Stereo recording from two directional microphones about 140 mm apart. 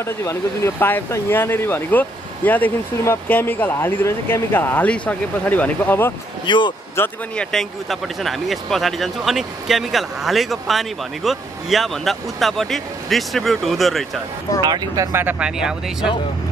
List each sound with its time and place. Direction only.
0.0 s speech: 20° left (ahead or behind)
6.4 s speech: 35° left (ahead or behind)
7.0 s speech: 5° left (ahead or behind)
14.6 s speech: 30° right (ahead or behind)
15.1 s speech: 10° right (ahead or behind)